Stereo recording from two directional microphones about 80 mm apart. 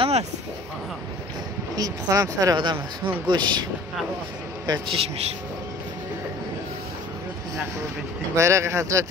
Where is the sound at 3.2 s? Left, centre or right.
Right.